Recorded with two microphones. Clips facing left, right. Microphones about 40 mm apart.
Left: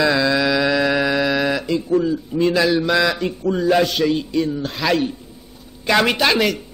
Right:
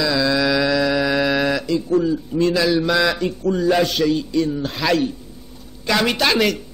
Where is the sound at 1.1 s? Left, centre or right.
Centre.